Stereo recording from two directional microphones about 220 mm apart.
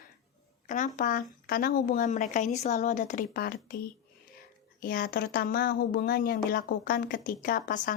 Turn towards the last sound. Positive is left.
turn(degrees=35)  # may be behind; listen again after turning